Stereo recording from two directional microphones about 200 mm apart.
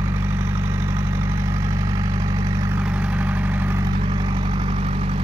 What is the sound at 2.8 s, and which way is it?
Vehicle, 5° right (ahead or behind).